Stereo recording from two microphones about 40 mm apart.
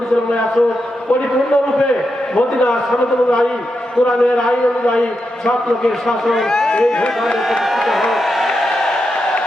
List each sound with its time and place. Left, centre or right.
4.0 s a man's voice: centre
6.3 s a man's voice: centre
6.7 s speech: left
7.7 s a sound: centre